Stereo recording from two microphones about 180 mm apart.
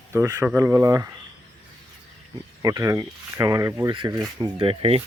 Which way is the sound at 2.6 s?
20° right (ahead or behind).